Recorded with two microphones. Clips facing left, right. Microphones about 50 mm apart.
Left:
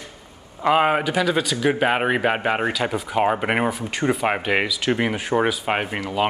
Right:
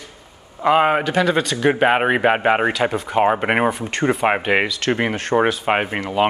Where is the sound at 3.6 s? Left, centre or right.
Centre.